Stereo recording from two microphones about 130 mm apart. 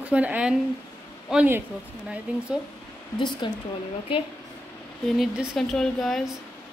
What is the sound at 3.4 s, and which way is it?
Speech, 40° left (ahead or behind).